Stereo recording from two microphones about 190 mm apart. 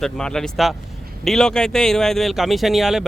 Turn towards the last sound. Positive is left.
turn(degrees=0)  # may be behind; listen again after turning